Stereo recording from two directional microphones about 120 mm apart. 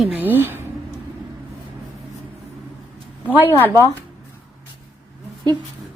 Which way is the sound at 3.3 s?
15° right (ahead or behind).